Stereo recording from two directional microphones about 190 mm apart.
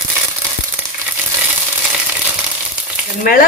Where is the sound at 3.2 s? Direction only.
50° left (ahead or behind).